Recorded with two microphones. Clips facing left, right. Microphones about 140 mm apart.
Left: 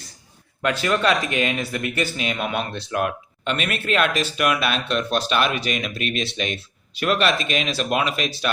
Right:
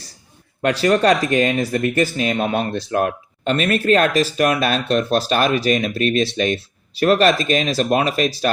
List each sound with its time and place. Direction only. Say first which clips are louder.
0.6 s speech: right 5 dB; 35° right (ahead or behind)